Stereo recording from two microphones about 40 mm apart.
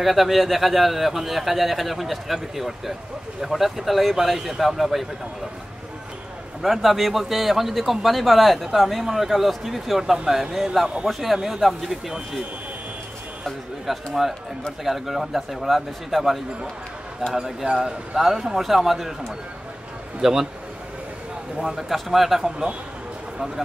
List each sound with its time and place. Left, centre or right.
0.0 s a man's voice: centre
6.6 s a man's voice: centre
10.1 s speech: centre
10.5 s a man's voice: centre
13.8 s a man's voice: centre
20.2 s speech: centre
21.5 s a man's voice: centre